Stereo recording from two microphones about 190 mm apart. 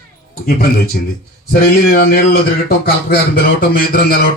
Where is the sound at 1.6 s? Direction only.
50° left (ahead or behind).